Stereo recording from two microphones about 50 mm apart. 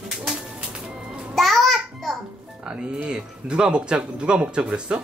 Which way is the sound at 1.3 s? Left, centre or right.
Centre.